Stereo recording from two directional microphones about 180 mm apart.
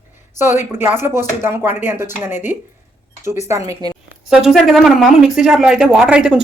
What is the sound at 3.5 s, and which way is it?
Speech, 20° right (ahead or behind).